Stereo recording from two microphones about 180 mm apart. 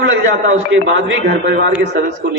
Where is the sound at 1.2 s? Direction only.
60° right (ahead or behind).